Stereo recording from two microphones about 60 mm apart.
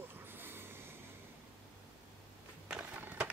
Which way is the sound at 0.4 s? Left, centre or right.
Right.